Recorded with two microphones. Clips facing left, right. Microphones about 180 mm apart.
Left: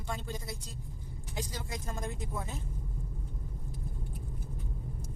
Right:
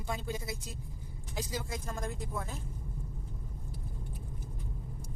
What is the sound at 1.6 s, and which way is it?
Speech, centre (ahead or behind).